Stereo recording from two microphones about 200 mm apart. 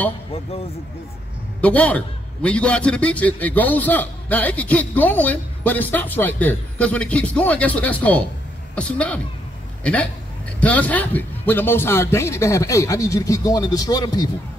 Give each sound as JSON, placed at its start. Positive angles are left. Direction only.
{"t": 1.6, "sound": "a man's voice", "side_deg": 5}
{"t": 10.6, "sound": "a man's voice", "side_deg": 5}